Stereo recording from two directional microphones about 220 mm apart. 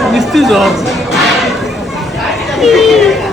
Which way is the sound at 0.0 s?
Centre (ahead or behind).